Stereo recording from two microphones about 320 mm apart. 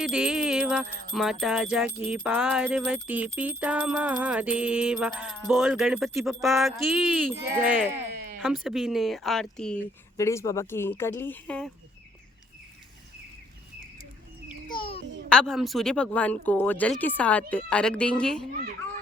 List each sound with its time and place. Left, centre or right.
0.0 s jingle bell: centre
14.7 s a sound: centre
15.3 s jingle bell: centre